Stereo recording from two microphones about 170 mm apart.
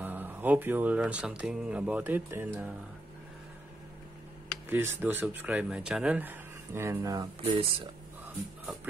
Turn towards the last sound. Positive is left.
turn(degrees=-35)  # may be behind; listen again after turning